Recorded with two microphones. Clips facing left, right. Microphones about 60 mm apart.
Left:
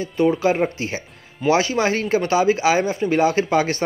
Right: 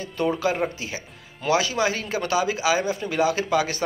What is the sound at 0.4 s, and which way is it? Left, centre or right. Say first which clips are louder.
Speech: left 5 dB; left.